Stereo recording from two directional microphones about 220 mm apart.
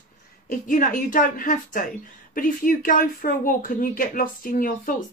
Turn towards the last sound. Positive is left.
turn(degrees=40)  # may be behind; listen again after turning